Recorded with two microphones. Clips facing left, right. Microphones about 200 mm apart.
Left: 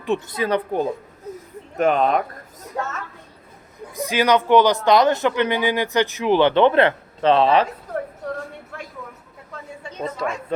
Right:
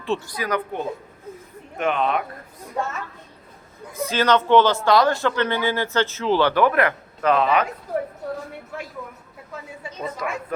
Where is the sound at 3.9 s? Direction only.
15° left (ahead or behind); by 7.7 s 30° left (ahead or behind).